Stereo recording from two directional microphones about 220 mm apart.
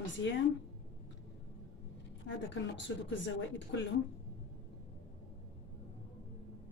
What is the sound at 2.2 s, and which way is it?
Speech, 55° left (ahead or behind).